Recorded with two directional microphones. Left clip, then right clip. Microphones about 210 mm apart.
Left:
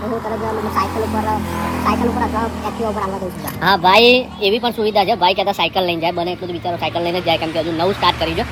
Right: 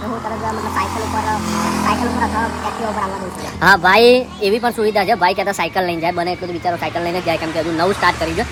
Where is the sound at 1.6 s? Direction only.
35° right (ahead or behind).